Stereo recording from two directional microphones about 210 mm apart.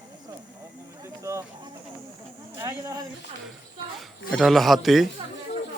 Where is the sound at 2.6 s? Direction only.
15° right (ahead or behind).